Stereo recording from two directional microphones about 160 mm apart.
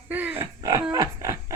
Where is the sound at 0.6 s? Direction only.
25° right (ahead or behind).